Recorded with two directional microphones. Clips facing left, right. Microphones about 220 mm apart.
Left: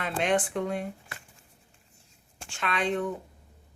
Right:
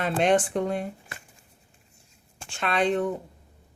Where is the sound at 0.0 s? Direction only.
40° right (ahead or behind).